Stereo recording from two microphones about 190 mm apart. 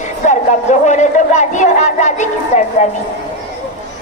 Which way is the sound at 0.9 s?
40° left (ahead or behind).